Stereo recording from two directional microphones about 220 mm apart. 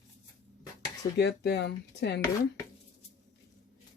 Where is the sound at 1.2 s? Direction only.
50° left (ahead or behind).